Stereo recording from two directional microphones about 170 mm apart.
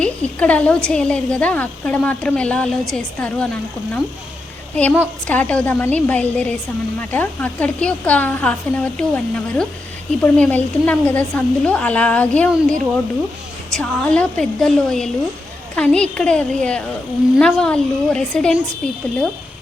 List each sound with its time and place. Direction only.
0.0 s a woman's voice: 10° left (ahead or behind)
13.7 s a woman's voice: 5° left (ahead or behind)